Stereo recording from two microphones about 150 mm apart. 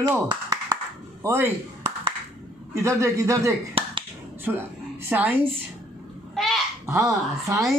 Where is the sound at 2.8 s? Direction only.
20° right (ahead or behind).